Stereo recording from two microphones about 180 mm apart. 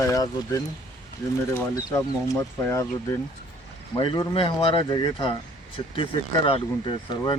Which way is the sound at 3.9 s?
30° left (ahead or behind).